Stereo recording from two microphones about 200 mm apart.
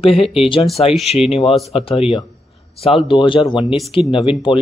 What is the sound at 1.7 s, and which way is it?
Speech, 30° left (ahead or behind).